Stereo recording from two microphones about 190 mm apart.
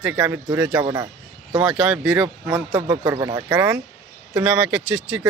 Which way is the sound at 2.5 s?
15° right (ahead or behind).